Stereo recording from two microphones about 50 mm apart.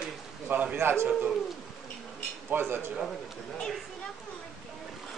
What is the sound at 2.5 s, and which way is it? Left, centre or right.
Speech, right.